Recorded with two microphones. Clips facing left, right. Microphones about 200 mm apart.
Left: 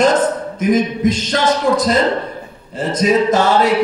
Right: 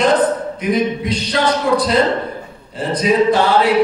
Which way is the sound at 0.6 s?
45° left (ahead or behind).